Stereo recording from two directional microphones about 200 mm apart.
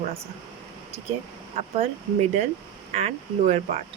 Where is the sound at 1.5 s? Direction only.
30° right (ahead or behind).